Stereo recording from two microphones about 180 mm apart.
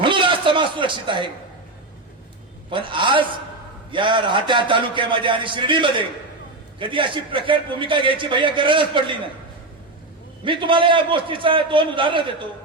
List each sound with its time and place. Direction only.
0.0 s a sound: 25° right (ahead or behind)
2.6 s a man's voice: 25° right (ahead or behind)
10.4 s a man's voice: 25° right (ahead or behind)